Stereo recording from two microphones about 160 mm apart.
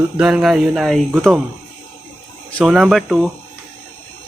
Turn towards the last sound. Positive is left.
turn(degrees=0)  # may be behind; listen again after turning